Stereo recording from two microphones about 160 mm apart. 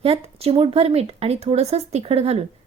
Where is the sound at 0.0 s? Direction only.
35° right (ahead or behind).